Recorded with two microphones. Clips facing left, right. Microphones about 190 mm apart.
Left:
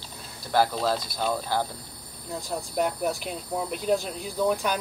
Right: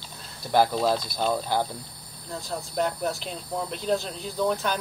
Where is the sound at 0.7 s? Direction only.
10° right (ahead or behind).